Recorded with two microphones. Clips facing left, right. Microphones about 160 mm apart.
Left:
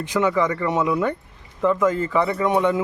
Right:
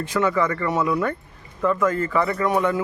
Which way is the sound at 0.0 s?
15° left (ahead or behind).